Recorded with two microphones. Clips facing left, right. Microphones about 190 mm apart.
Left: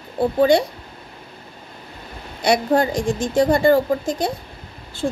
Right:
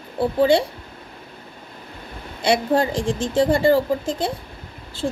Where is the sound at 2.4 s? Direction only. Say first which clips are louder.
Left 1 dB; 30° right (ahead or behind).